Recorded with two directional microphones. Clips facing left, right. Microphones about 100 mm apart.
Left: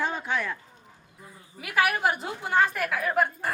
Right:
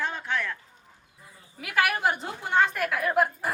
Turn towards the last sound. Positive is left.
turn(degrees=0)  # may be behind; listen again after turning